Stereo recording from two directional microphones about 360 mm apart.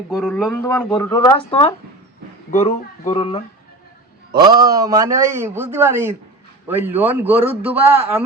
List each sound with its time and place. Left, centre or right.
0.1 s speech: centre
4.4 s a man's voice: centre